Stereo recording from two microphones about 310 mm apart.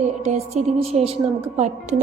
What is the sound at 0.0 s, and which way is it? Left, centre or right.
A woman's voice, right.